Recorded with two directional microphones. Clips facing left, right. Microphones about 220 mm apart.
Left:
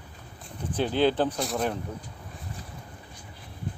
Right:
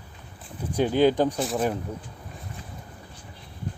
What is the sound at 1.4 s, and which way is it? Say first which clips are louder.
Speech: right 3 dB; centre (ahead or behind).